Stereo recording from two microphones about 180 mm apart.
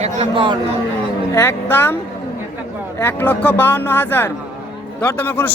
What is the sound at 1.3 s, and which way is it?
Speech, 15° left (ahead or behind).